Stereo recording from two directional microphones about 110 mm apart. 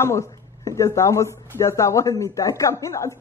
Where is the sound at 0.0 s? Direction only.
25° left (ahead or behind).